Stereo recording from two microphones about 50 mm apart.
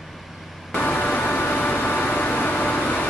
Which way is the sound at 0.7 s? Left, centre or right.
Left.